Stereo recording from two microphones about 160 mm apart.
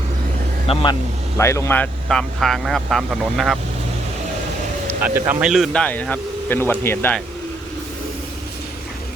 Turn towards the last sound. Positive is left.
turn(degrees=15)  # may be behind; listen again after turning